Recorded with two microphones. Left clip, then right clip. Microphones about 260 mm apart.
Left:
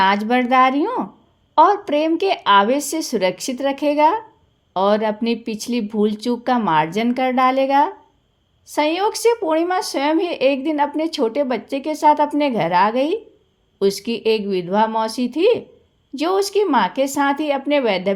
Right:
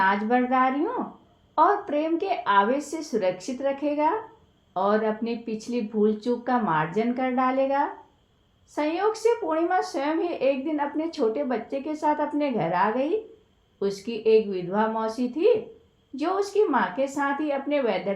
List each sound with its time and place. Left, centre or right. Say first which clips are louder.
0.0 s speech: left 6 dB; left